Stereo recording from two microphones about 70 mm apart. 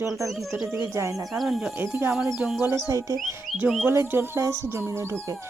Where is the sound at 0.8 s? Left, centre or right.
Right.